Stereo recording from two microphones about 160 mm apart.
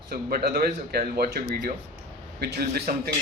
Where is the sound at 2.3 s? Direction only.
85° right.